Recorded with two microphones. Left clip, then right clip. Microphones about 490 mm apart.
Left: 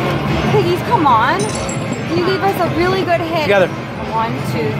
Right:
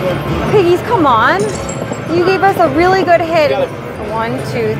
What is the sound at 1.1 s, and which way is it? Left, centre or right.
Speech, right.